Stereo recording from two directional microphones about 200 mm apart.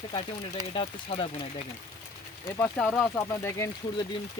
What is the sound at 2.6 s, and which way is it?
Speech, centre (ahead or behind).